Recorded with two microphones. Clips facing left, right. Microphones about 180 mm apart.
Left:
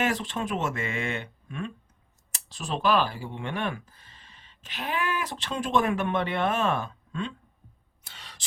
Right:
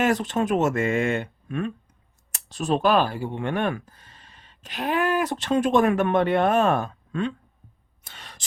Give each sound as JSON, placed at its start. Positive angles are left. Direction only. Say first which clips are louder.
{"t": 0.0, "sound": "speech", "louder": "right 6 dB", "side_deg": -45}
{"t": 8.0, "sound": "gasp", "louder": "right 3 dB", "side_deg": -50}